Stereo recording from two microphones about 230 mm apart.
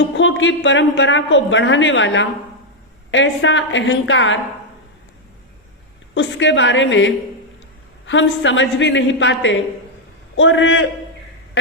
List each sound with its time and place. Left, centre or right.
0.2 s a woman's voice: left
6.1 s a woman's voice: left